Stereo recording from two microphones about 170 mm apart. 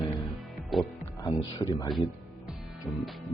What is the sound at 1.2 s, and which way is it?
Speech, 20° left (ahead or behind).